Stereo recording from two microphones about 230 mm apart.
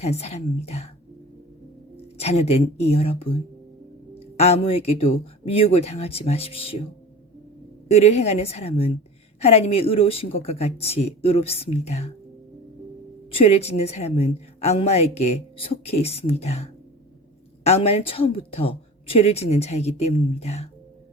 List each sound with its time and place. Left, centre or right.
0.0 s a woman's voice: left
2.1 s a woman's voice: left
7.9 s a woman's voice: left
13.3 s a woman's voice: left